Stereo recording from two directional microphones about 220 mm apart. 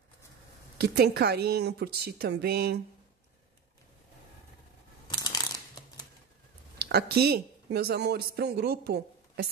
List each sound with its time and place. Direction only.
0.7 s a woman's voice: 45° right (ahead or behind)
5.0 s a sound: 15° left (ahead or behind)
6.8 s speech: 45° right (ahead or behind)